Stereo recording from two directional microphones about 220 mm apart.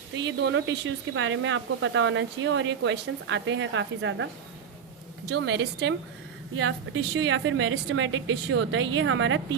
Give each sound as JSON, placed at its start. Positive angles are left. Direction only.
{"t": 0.3, "sound": "speech", "side_deg": -55}
{"t": 5.3, "sound": "speech", "side_deg": -55}